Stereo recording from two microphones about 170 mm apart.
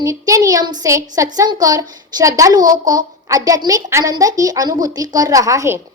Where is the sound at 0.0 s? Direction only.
20° right (ahead or behind).